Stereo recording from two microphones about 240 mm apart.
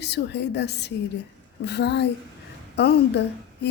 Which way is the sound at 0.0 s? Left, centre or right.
Left.